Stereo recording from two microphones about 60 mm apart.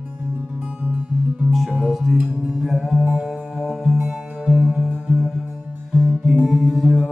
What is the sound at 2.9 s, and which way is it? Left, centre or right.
Music, centre.